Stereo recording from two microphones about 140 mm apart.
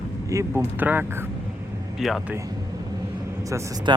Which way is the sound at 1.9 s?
5° right (ahead or behind).